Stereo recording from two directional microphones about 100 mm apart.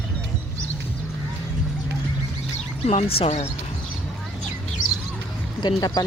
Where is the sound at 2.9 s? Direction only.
80° left.